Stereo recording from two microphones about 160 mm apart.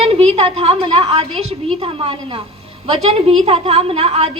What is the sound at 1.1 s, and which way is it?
A woman's voice, 40° right (ahead or behind).